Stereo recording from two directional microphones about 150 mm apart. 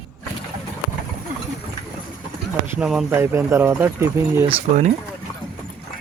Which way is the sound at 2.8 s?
5° right (ahead or behind).